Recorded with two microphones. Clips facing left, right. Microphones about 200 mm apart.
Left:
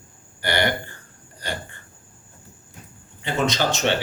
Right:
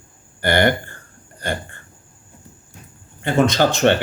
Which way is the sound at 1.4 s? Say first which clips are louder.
Right 6 dB; 50° right (ahead or behind).